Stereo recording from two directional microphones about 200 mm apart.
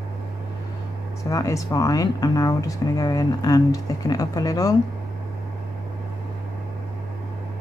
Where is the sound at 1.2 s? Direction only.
15° left (ahead or behind).